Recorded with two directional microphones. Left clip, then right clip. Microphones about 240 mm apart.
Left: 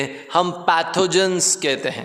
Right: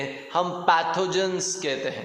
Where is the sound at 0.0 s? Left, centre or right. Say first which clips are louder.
Left 6 dB; left.